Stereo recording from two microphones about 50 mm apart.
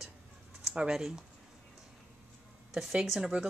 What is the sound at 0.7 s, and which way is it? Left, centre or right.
Speech, centre.